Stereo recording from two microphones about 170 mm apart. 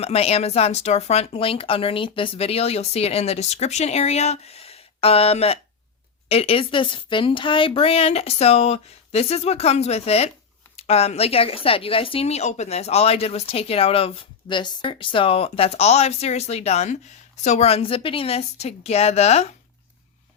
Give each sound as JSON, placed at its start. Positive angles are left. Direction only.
{"t": 0.0, "sound": "speech", "side_deg": 35}